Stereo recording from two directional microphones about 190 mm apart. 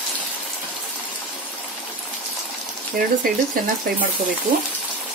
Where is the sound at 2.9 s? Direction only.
45° right (ahead or behind).